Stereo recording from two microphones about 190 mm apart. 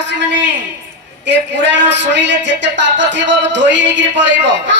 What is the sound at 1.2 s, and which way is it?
A man's voice, 70° right (ahead or behind).